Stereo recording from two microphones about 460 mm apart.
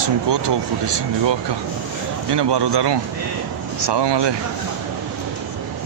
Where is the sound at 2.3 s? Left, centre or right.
Right.